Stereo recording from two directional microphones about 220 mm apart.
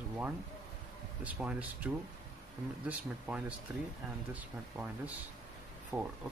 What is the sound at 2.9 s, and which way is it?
Speech, 5° right (ahead or behind).